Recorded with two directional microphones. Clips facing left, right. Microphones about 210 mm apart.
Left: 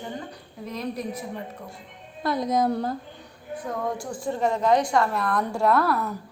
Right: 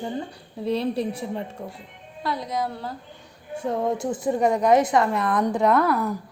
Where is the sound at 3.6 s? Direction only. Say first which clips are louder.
Right 5 dB; 25° right (ahead or behind).